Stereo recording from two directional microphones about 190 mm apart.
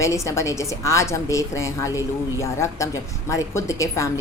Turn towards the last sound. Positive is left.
turn(degrees=15)  # may be behind; listen again after turning